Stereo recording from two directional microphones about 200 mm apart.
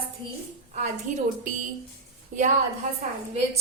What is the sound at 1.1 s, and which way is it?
Speech, 35° right (ahead or behind).